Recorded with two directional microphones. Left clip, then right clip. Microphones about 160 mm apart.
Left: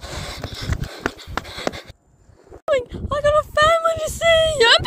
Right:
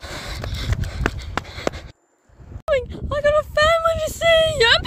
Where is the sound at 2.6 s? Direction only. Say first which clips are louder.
Left 1 dB; 5° left (ahead or behind).